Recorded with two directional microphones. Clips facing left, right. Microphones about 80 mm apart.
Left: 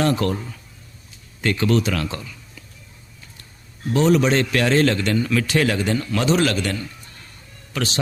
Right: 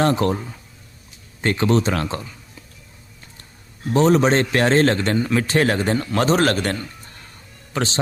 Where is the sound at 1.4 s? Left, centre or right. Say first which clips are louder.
Right 1 dB; right.